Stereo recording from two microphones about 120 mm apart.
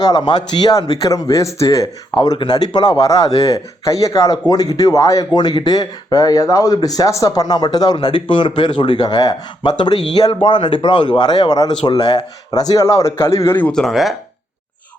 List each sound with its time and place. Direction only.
0.0 s a man's voice: 35° left (ahead or behind)
13.6 s speech: 10° left (ahead or behind)